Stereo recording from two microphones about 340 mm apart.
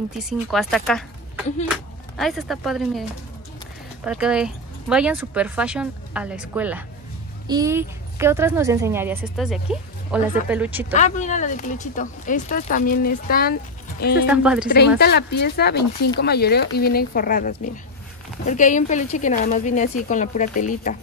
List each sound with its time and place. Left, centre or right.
0.2 s a woman's voice: centre
11.0 s speech: left
14.2 s speech: centre
15.0 s speech: left